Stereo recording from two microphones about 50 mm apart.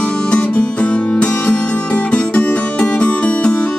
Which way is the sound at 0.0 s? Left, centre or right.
Left.